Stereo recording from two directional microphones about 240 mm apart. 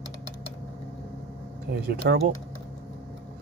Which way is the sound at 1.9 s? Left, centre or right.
Right.